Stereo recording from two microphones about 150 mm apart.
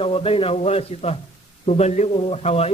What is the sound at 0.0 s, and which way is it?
A man's voice, 40° left (ahead or behind).